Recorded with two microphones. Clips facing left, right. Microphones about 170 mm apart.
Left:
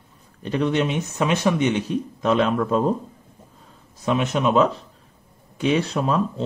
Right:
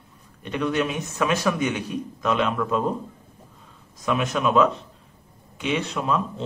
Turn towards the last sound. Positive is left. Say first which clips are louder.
# left 3 dB
turn(degrees=35)  # may be behind; listen again after turning